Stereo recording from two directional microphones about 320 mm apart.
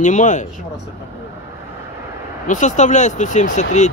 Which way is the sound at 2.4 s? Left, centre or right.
Left.